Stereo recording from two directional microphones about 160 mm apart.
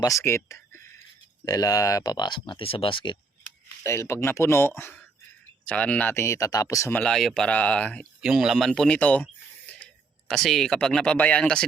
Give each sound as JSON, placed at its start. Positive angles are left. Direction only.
{"t": 0.0, "sound": "speech", "side_deg": 20}
{"t": 3.8, "sound": "speech", "side_deg": 15}
{"t": 7.0, "sound": "speech", "side_deg": 5}
{"t": 8.2, "sound": "speech", "side_deg": 0}